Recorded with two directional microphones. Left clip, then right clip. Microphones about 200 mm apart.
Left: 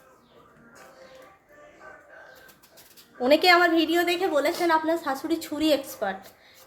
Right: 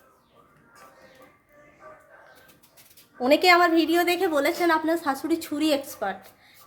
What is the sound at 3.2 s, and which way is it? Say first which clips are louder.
A woman's voice: even; 10° right (ahead or behind).